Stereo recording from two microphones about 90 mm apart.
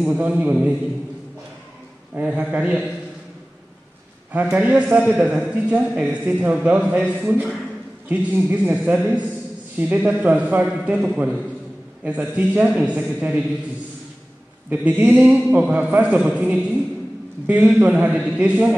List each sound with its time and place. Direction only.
0.0 s a man's voice: 15° right (ahead or behind)
2.1 s a man's voice: 15° right (ahead or behind)
4.3 s a man's voice: 15° right (ahead or behind)
14.7 s a man's voice: 15° right (ahead or behind)